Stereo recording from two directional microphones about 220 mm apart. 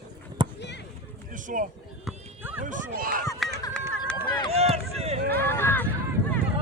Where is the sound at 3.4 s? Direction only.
Centre (ahead or behind).